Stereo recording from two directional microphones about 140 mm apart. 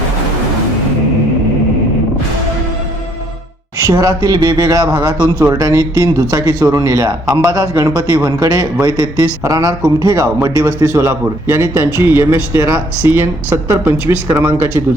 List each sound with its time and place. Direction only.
3.8 s a man's voice: 25° right (ahead or behind)